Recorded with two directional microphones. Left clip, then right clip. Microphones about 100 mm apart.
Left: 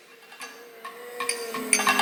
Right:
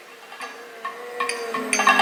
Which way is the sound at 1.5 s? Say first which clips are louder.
Right 5 dB; 10° right (ahead or behind).